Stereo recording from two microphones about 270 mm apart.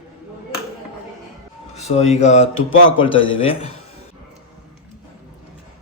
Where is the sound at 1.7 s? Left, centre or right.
Left.